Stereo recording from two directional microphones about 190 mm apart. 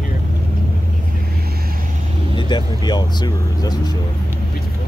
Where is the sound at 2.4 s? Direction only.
25° left (ahead or behind).